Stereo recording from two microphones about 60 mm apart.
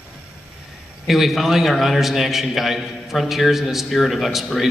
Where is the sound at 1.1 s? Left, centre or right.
Centre.